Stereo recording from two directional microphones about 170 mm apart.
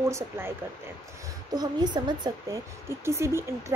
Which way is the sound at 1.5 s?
25° right (ahead or behind).